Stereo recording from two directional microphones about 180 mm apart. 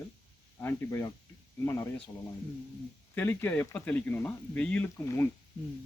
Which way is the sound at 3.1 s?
10° left (ahead or behind).